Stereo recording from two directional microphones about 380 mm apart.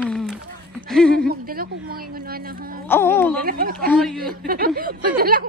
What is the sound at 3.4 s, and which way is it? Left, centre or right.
Speech, right.